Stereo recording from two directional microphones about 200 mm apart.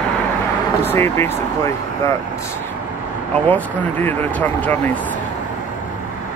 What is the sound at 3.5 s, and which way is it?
Speech, 10° left (ahead or behind).